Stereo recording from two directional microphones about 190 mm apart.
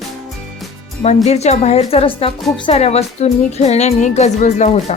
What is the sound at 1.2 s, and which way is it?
Speech, 35° left (ahead or behind).